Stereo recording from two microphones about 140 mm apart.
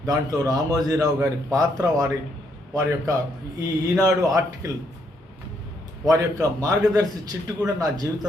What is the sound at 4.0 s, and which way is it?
Speech, 25° right (ahead or behind).